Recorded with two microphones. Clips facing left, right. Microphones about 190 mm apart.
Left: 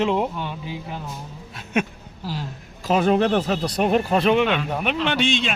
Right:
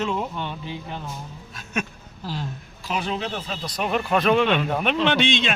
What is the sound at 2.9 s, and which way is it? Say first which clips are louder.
Speech: left 10 dB; 50° left (ahead or behind).